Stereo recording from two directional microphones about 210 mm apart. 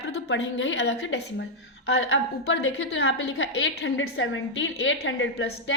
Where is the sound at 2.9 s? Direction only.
55° left (ahead or behind).